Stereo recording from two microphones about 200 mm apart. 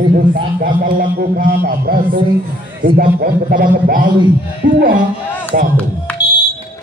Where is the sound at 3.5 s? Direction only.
45° right (ahead or behind).